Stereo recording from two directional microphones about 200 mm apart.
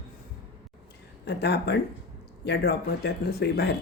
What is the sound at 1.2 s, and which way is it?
Speech, 55° left (ahead or behind).